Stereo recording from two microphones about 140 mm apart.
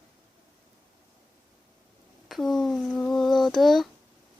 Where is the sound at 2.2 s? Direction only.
Centre (ahead or behind).